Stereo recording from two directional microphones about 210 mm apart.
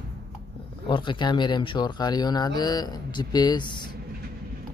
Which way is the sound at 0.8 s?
25° left (ahead or behind).